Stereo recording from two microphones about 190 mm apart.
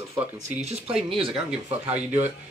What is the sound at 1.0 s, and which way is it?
Speech, 30° right (ahead or behind).